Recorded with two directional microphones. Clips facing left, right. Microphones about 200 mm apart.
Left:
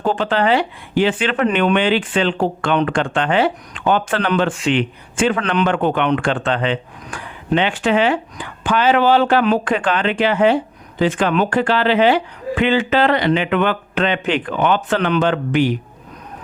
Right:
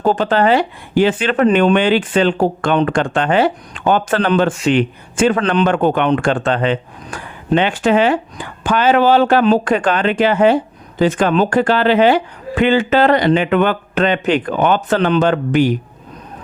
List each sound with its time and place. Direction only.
0.0 s speech: 40° right (ahead or behind)
5.6 s speech: 45° right (ahead or behind)
14.9 s speech: 30° right (ahead or behind)